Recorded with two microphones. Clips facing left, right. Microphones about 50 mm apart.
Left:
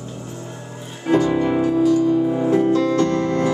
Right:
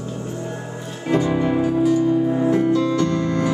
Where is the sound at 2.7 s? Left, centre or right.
Left.